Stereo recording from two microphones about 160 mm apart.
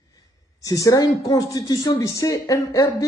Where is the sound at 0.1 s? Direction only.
20° left (ahead or behind).